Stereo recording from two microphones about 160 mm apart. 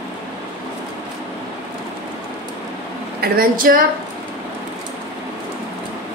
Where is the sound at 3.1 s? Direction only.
70° right (ahead or behind).